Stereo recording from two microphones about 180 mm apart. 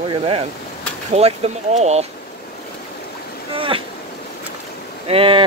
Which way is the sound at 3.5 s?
30° right (ahead or behind).